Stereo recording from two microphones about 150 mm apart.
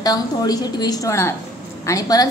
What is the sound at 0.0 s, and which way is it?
A woman's voice, 25° left (ahead or behind).